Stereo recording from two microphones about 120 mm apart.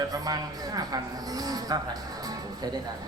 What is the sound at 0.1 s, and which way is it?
A man's voice, 30° right (ahead or behind).